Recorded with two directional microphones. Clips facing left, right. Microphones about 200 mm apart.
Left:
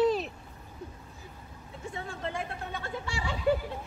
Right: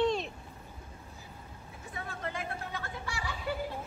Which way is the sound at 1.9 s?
25° left (ahead or behind).